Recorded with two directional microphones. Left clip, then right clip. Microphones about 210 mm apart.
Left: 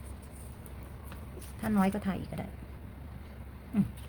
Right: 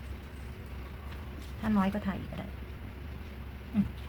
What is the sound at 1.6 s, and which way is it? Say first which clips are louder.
Speech: even; 45° left (ahead or behind).